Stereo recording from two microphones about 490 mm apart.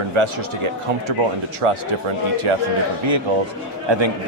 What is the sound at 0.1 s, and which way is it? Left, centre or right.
A man's voice, right.